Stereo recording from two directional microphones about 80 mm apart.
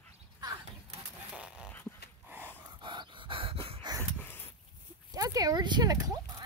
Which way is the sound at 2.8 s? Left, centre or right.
Right.